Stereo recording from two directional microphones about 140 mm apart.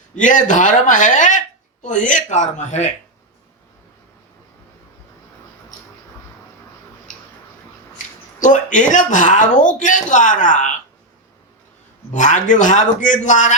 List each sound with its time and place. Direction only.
0.2 s speech: 65° left (ahead or behind)
7.9 s speech: 60° left (ahead or behind)
12.1 s speech: 60° left (ahead or behind)